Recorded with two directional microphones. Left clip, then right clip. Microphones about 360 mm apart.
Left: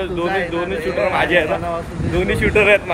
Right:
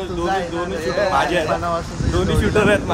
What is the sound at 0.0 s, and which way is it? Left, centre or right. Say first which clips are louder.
Speech: left 2 dB; centre.